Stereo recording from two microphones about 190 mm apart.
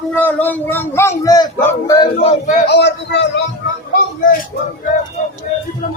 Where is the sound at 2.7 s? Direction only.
65° left (ahead or behind).